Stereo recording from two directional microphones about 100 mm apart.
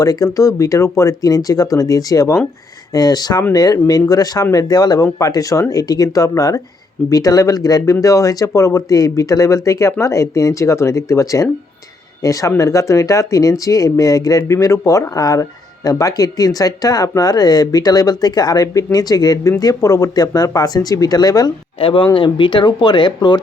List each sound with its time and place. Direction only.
0.0 s speech: 35° left (ahead or behind)
21.8 s speech: 60° left (ahead or behind)